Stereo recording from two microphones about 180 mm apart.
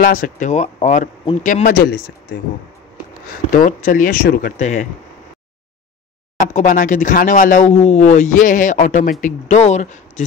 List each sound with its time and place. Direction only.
0.0 s speech: 50° left (ahead or behind); by 2.4 s 65° left (ahead or behind)
3.3 s speech: 50° left (ahead or behind)
4.6 s speech: 40° left (ahead or behind)
6.4 s speech: 45° left (ahead or behind)